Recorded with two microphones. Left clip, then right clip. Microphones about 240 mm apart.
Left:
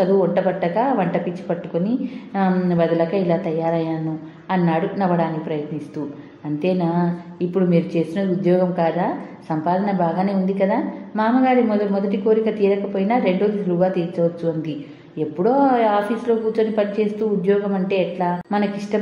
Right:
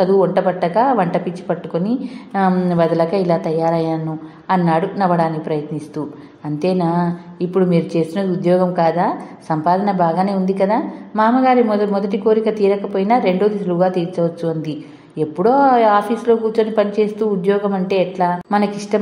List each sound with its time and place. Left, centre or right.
0.0 s a woman's voice: right
6.6 s a woman's voice: right